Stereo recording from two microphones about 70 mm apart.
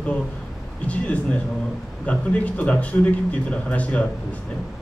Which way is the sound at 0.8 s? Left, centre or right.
Centre.